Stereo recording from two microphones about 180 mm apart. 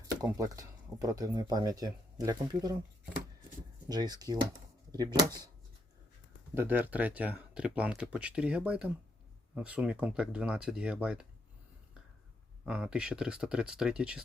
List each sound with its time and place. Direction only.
0.2 s speech: 20° right (ahead or behind)
3.8 s speech: 20° right (ahead or behind)
6.5 s speech: 10° right (ahead or behind)
12.6 s speech: 5° right (ahead or behind)